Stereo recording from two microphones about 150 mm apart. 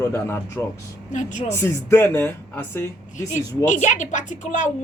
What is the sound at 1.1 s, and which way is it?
Speech, 55° left (ahead or behind).